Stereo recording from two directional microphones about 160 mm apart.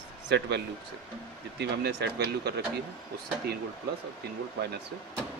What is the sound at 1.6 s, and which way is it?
Speech, 90° right.